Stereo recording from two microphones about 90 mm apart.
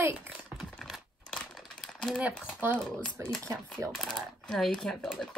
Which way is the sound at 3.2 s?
30° right (ahead or behind).